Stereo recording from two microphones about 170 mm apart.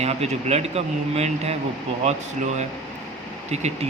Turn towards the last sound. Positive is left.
turn(degrees=-40)  # may be behind; listen again after turning